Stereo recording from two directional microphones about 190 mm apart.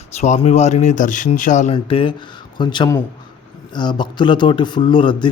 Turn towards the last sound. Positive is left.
turn(degrees=25)  # may be behind; listen again after turning